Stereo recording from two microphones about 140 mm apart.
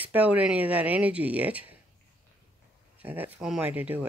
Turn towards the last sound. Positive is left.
turn(degrees=-10)  # may be behind; listen again after turning